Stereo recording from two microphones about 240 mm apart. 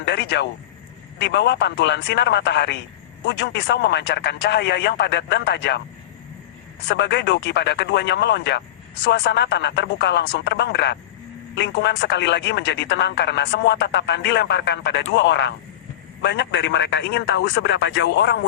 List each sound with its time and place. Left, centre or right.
0.0 s a sound: left
1.2 s speech: left
6.8 s speech: left